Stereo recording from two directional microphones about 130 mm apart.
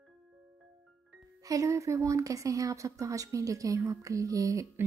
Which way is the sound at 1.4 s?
25° right (ahead or behind).